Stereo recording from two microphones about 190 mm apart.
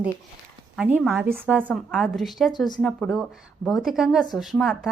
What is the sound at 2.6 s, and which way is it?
Speech, 20° left (ahead or behind).